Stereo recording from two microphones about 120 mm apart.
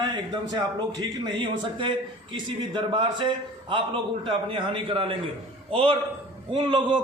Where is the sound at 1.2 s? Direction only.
40° right (ahead or behind).